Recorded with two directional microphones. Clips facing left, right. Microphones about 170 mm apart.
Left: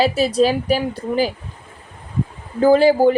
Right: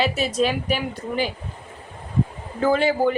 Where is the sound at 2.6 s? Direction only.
35° left (ahead or behind).